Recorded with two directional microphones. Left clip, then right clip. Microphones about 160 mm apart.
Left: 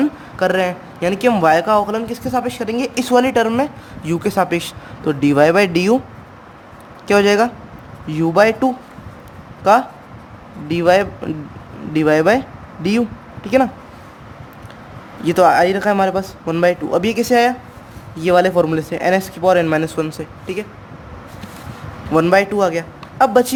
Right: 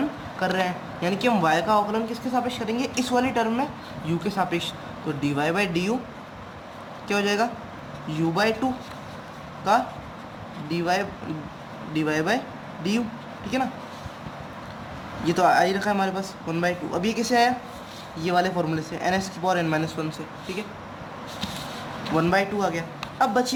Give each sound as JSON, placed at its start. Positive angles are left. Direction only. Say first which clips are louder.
{"t": 0.3, "sound": "speech", "louder": "left 8 dB", "side_deg": 90}
{"t": 7.1, "sound": "speech", "louder": "left 11 dB", "side_deg": 90}
{"t": 10.7, "sound": "speech", "louder": "left 11 dB", "side_deg": 90}
{"t": 13.4, "sound": "speech", "louder": "left 12 dB", "side_deg": 90}
{"t": 15.2, "sound": "speech", "louder": "left 8 dB", "side_deg": 90}
{"t": 18.2, "sound": "speech", "louder": "left 10 dB", "side_deg": 75}
{"t": 22.1, "sound": "speech", "louder": "left 9 dB", "side_deg": 85}